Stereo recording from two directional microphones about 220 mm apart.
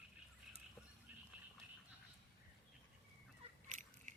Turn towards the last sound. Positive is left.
turn(degrees=-35)  # may be behind; listen again after turning